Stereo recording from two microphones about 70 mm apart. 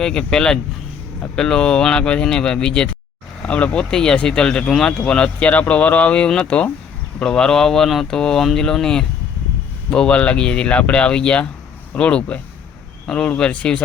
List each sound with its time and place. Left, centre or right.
0.0 s speech: centre